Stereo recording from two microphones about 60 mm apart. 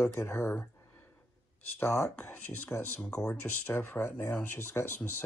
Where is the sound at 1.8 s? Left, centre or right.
Left.